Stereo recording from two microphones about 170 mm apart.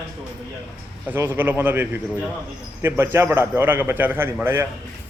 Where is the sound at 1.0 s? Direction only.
10° right (ahead or behind).